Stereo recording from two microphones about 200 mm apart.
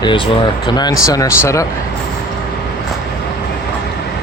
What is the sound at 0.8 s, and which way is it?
Speech, 20° left (ahead or behind).